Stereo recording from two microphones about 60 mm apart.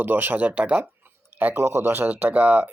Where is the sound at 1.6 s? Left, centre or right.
Right.